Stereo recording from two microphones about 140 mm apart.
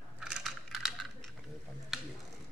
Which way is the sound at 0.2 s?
Centre (ahead or behind).